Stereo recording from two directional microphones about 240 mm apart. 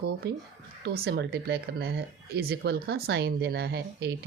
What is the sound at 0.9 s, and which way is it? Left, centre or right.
Speech, right.